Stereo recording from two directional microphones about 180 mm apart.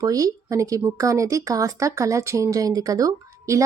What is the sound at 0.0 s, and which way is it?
Speech, 20° right (ahead or behind).